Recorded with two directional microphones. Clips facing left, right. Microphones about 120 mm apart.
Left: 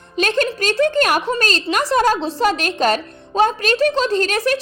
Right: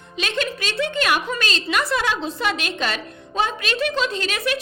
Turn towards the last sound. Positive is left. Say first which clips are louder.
# left 7 dB
turn(degrees=40)  # may be behind; listen again after turning